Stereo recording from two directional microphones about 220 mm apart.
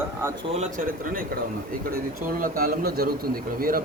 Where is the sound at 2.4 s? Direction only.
40° right (ahead or behind).